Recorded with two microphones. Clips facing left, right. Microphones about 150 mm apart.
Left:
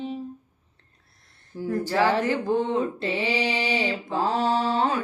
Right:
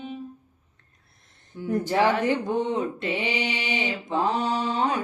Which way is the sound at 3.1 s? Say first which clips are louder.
Left 2 dB; 20° right (ahead or behind).